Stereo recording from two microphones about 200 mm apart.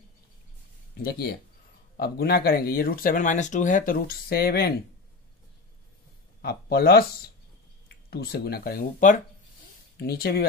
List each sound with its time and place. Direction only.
1.0 s speech: 50° left (ahead or behind)
6.4 s speech: 50° left (ahead or behind)
8.1 s speech: 50° left (ahead or behind)